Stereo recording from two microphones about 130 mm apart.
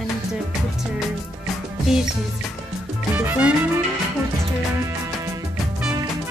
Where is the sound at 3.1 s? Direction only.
15° right (ahead or behind).